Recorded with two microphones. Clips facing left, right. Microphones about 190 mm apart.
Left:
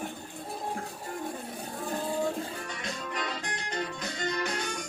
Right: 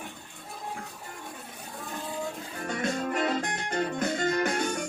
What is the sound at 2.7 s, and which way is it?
Music, 50° right (ahead or behind).